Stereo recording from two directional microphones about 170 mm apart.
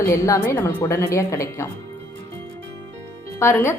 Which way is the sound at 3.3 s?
15° left (ahead or behind).